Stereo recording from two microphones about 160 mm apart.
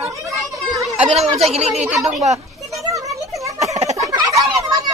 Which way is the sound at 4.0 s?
20° right (ahead or behind).